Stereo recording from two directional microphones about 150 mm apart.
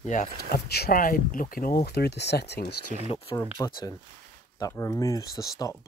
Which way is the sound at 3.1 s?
40° left (ahead or behind).